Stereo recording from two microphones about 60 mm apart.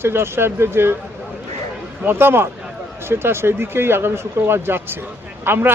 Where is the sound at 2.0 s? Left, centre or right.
Right.